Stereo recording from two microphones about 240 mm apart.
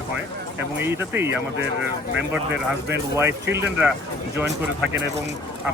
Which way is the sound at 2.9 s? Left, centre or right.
Centre.